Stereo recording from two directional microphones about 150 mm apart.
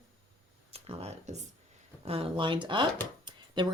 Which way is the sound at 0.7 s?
45° right (ahead or behind).